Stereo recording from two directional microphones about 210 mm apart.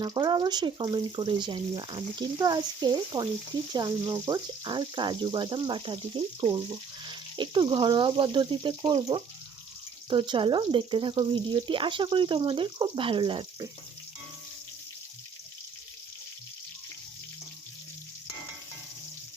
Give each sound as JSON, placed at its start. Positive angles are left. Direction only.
{"t": 0.0, "sound": "speech", "side_deg": -20}